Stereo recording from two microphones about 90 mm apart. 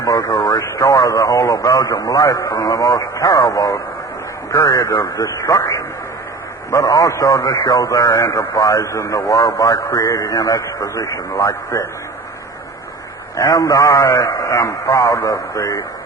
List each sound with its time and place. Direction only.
0.0 s speech: 40° left (ahead or behind)
13.3 s speech: 40° left (ahead or behind)